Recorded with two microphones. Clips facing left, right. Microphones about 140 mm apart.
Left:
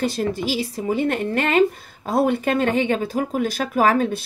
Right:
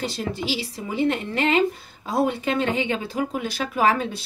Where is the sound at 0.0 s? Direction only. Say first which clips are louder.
Left 5 dB; 50° left (ahead or behind).